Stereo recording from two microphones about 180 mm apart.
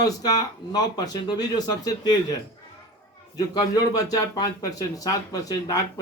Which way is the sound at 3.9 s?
20° left (ahead or behind).